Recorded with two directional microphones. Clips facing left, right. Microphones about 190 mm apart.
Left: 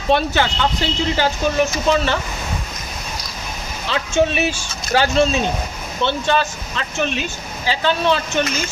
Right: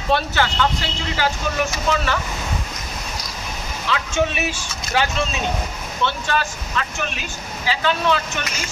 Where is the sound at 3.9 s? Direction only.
30° left (ahead or behind).